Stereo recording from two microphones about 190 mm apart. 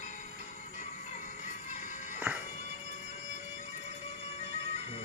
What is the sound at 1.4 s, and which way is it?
Music, 40° left (ahead or behind).